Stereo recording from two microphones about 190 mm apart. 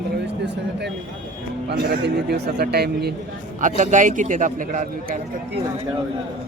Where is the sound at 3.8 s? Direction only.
40° right (ahead or behind).